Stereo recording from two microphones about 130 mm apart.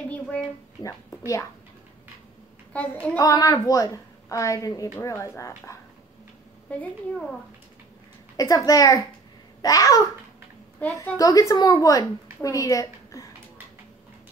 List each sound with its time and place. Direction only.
0.8 s a woman's voice: 25° left (ahead or behind)
2.7 s a child's voice: 10° left (ahead or behind)
3.2 s a woman's voice: 25° left (ahead or behind)
6.8 s a woman's voice: 5° left (ahead or behind)
8.4 s a woman's voice: 25° left (ahead or behind)
10.8 s a child's voice: 15° left (ahead or behind)
11.1 s a woman's voice: 25° left (ahead or behind)